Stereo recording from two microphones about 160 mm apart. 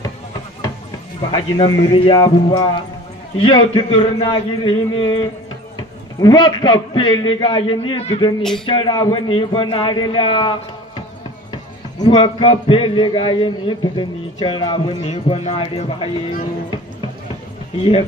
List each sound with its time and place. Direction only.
1.3 s a man's voice: 30° left (ahead or behind)
8.4 s music: 5° left (ahead or behind)
8.6 s a man's voice: 30° left (ahead or behind)
17.7 s a man's voice: 35° left (ahead or behind)